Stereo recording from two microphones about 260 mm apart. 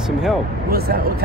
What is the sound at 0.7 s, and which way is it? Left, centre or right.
Speech, right.